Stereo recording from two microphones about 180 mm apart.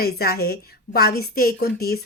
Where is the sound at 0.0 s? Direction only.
60° left (ahead or behind).